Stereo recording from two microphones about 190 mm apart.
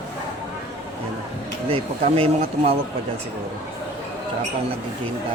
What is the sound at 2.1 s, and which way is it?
Speech, 30° right (ahead or behind).